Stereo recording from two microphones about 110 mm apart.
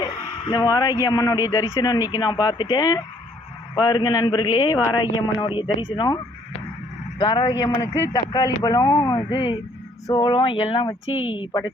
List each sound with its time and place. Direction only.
0.0 s a sound: 45° left (ahead or behind)
0.6 s speech: 35° left (ahead or behind)
7.2 s speech: 50° left (ahead or behind)
7.8 s a man's voice: 25° left (ahead or behind)
8.1 s speech: 40° left (ahead or behind)